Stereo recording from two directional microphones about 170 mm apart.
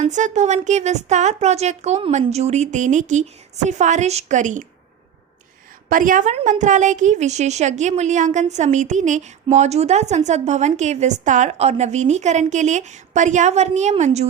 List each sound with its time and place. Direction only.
0.0 s a woman's voice: 45° right (ahead or behind)
5.9 s a woman's voice: 50° right (ahead or behind)